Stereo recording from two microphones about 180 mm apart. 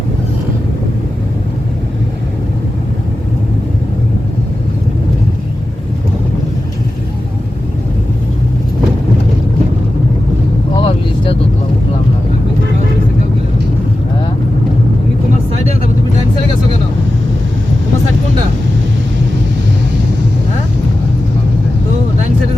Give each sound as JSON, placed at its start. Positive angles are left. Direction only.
{"t": 10.8, "sound": "vehicle", "side_deg": 30}